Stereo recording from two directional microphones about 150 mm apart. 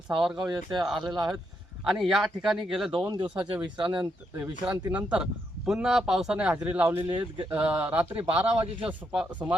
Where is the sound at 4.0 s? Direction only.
10° right (ahead or behind).